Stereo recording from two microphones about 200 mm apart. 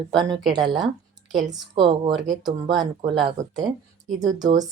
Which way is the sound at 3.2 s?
20° right (ahead or behind).